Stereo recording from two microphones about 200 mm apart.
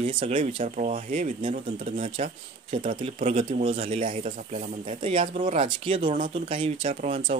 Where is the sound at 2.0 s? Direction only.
30° right (ahead or behind).